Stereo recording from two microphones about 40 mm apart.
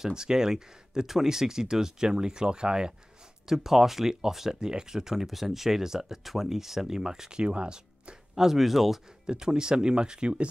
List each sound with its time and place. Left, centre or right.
0.0 s speech: centre
3.4 s speech: centre; by 8.2 s right
8.4 s speech: centre
9.2 s speech: centre